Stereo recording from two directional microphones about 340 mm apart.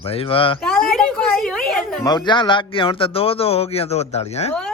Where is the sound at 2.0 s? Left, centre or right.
Centre.